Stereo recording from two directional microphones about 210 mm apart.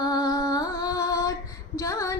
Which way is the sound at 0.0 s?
20° left (ahead or behind).